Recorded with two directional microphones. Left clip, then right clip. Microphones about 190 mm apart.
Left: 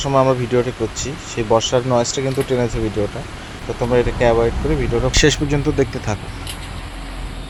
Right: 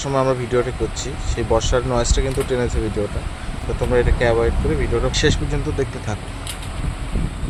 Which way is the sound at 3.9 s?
15° left (ahead or behind).